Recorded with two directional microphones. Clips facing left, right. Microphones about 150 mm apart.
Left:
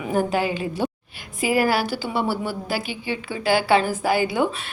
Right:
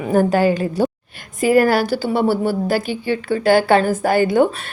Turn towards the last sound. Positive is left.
turn(degrees=-50)  # may be behind; listen again after turning